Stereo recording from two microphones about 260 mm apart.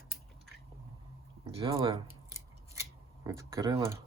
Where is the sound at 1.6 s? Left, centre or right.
Centre.